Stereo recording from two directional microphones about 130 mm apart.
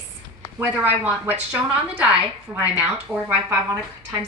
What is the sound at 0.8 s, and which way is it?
A woman's voice, 15° right (ahead or behind).